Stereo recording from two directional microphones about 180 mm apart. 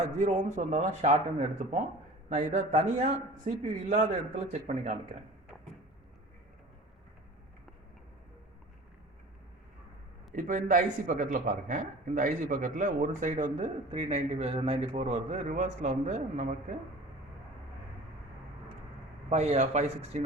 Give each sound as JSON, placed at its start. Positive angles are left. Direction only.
{"t": 0.0, "sound": "a man's voice", "side_deg": -40}
{"t": 10.3, "sound": "a man's voice", "side_deg": -45}
{"t": 19.3, "sound": "speech", "side_deg": -40}